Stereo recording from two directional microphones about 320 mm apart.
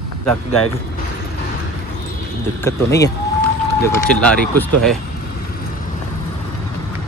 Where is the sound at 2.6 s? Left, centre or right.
Centre.